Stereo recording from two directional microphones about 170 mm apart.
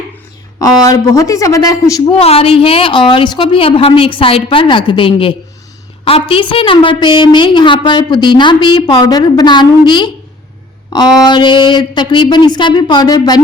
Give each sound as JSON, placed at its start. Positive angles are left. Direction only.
{"t": 0.6, "sound": "a woman's voice", "side_deg": 20}
{"t": 2.2, "sound": "a woman's voice", "side_deg": 35}